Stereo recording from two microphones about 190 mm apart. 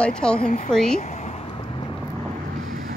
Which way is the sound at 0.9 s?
35° left (ahead or behind).